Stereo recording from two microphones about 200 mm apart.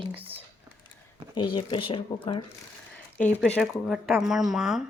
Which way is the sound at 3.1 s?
5° left (ahead or behind).